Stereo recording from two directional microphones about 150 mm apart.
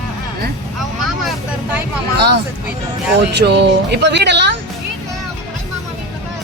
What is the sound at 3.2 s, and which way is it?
Speech, 90° right.